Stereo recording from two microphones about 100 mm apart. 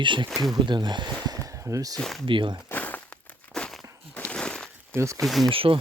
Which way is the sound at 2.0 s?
5° left (ahead or behind).